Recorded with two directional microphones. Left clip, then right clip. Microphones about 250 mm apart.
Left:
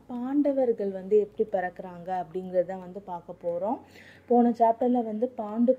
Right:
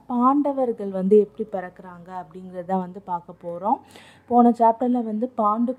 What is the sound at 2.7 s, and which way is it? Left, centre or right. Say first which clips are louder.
Speech: right 10 dB; right.